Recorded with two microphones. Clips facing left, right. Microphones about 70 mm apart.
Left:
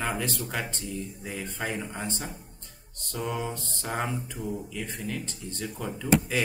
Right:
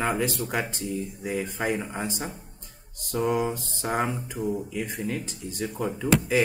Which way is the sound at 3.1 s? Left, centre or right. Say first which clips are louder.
Right 7 dB; centre.